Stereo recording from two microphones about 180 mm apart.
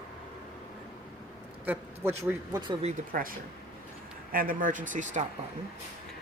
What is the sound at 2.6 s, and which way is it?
Speech, 25° right (ahead or behind).